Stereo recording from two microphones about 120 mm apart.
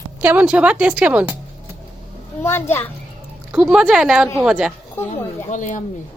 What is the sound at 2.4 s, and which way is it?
Speech, 20° left (ahead or behind).